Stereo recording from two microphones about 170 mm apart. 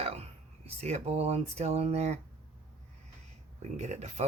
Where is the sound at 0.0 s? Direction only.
40° right (ahead or behind).